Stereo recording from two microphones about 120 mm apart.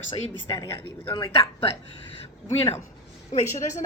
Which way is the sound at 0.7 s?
20° left (ahead or behind).